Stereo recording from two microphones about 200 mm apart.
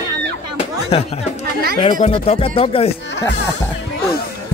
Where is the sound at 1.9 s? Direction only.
35° left (ahead or behind).